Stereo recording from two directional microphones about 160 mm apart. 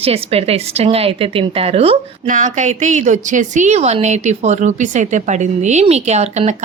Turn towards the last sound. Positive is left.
turn(degrees=-45)  # may be behind; listen again after turning